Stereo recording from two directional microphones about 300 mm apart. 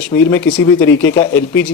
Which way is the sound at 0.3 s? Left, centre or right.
Centre.